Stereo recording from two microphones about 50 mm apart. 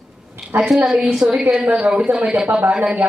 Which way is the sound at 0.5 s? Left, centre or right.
Right.